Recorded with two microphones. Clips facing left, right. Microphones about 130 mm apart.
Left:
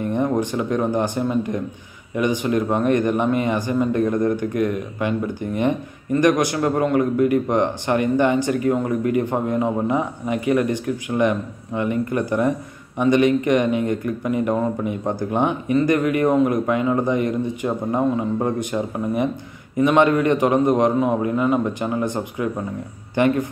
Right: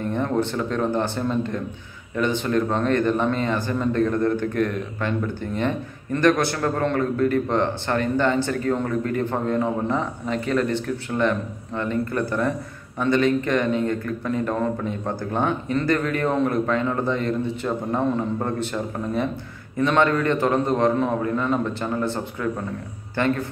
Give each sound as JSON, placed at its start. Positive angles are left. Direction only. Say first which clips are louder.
{"t": 0.0, "sound": "a man's voice", "louder": "left 2 dB", "side_deg": 15}